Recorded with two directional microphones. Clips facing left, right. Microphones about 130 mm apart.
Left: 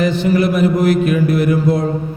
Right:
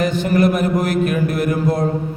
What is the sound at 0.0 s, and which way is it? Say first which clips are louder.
A man's voice: left 1 dB; 45° right (ahead or behind).